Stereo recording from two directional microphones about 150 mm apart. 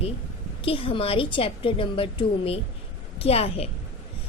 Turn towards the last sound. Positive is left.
turn(degrees=40)  # may be behind; listen again after turning